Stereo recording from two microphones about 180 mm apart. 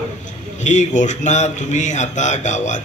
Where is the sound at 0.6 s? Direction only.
40° left (ahead or behind).